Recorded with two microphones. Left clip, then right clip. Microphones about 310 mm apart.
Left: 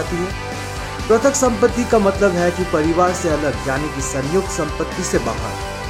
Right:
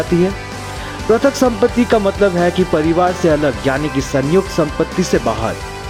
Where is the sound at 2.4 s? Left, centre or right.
Right.